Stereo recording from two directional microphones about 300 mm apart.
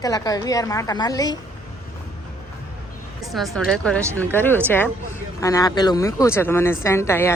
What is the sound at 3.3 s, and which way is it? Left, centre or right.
Speech, centre.